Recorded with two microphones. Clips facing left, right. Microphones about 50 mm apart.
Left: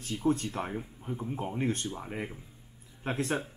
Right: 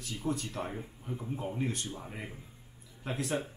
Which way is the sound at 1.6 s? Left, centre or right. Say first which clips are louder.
Left 5 dB; left.